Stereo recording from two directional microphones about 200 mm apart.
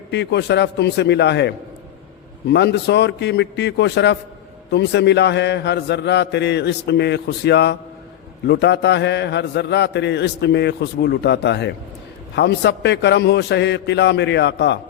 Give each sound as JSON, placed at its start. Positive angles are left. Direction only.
{"t": 0.1, "sound": "a man's voice", "side_deg": 60}